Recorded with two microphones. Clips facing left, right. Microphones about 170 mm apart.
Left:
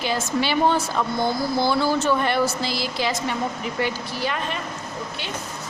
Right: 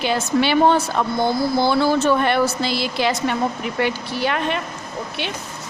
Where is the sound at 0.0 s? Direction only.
65° right (ahead or behind).